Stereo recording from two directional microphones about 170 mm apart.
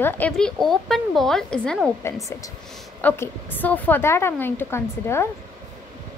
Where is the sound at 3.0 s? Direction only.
15° left (ahead or behind).